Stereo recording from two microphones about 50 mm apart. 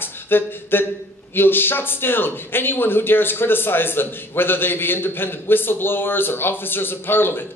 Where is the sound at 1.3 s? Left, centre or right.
Left.